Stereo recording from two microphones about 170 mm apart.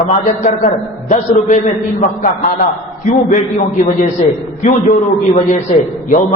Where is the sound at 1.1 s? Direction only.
45° left (ahead or behind).